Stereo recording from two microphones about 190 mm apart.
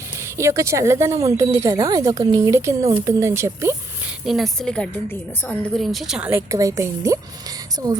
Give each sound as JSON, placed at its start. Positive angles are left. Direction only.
{"t": 0.3, "sound": "speech", "side_deg": -15}
{"t": 4.3, "sound": "a woman's voice", "side_deg": 0}